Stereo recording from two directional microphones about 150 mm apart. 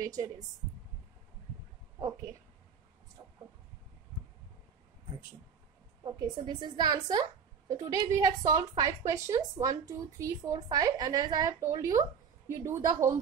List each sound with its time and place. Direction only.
0.0 s a woman's voice: 25° right (ahead or behind)
3.2 s a sound: 25° right (ahead or behind)
6.0 s a woman's voice: 25° right (ahead or behind)